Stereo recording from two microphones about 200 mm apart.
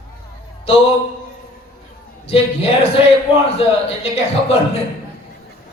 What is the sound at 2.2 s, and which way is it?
Speech, 30° left (ahead or behind).